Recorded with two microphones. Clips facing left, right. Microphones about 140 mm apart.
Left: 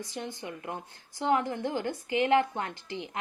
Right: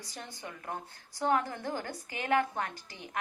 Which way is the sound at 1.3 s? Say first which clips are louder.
Left 3 dB; 20° left (ahead or behind).